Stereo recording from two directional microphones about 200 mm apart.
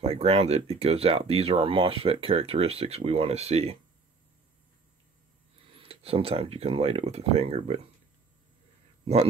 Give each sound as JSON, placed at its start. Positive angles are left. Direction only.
{"t": 0.0, "sound": "speech", "side_deg": -30}
{"t": 5.8, "sound": "speech", "side_deg": -30}
{"t": 9.0, "sound": "speech", "side_deg": -30}